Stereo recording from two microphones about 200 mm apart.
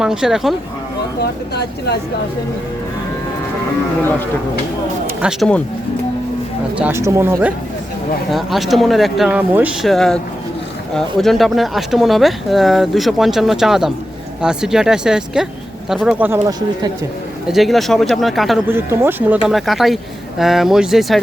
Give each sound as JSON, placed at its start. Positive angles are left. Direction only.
{"t": 0.0, "sound": "speech", "side_deg": -5}
{"t": 1.2, "sound": "speech", "side_deg": 55}
{"t": 5.0, "sound": "speech", "side_deg": -5}
{"t": 6.7, "sound": "speech", "side_deg": -10}
{"t": 8.3, "sound": "speech", "side_deg": 0}
{"t": 16.5, "sound": "speech", "side_deg": -20}
{"t": 17.5, "sound": "speech", "side_deg": 0}
{"t": 18.7, "sound": "speech", "side_deg": -10}